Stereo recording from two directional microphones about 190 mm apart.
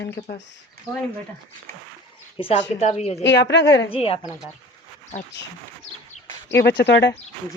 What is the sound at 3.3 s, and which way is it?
Speech, 65° left (ahead or behind).